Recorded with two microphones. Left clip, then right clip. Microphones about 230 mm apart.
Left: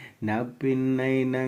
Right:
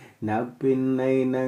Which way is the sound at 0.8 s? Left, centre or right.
Left.